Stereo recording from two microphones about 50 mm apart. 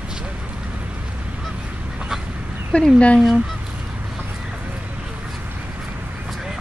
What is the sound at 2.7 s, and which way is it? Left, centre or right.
Speech, left.